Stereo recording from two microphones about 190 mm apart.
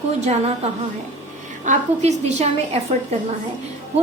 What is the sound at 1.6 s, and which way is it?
A woman's voice, 40° right (ahead or behind).